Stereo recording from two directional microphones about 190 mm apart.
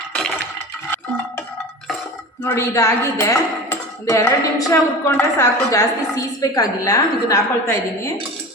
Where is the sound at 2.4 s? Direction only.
15° left (ahead or behind).